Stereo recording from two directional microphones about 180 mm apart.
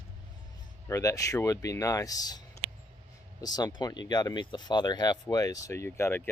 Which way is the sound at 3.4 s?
20° left (ahead or behind).